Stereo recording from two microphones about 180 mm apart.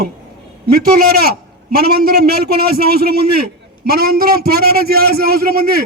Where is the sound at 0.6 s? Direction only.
55° right (ahead or behind).